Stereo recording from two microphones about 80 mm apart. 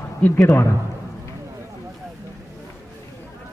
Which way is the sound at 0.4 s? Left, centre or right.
Left.